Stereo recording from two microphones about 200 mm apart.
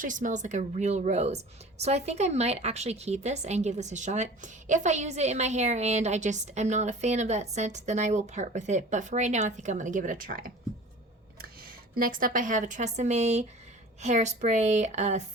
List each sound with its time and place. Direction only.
0.0 s a woman's voice: 40° right (ahead or behind)
11.6 s a woman's voice: 45° right (ahead or behind)